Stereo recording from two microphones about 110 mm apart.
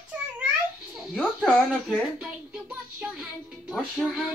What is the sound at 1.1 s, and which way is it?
Speech, centre (ahead or behind).